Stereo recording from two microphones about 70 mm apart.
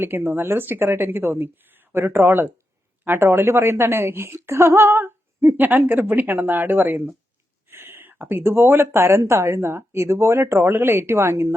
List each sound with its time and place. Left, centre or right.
0.0 s speech: right